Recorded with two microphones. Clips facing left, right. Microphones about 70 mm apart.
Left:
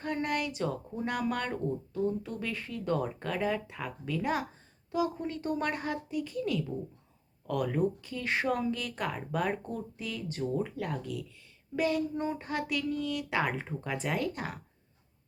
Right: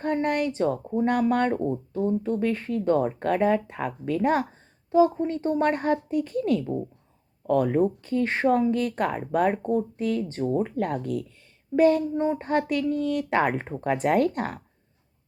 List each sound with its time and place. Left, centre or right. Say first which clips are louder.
0.0 s speech: right 8 dB; right
4.9 s speech: right 11 dB; right
12.1 s speech: right 8 dB; right
12.4 s speech: right 9 dB; right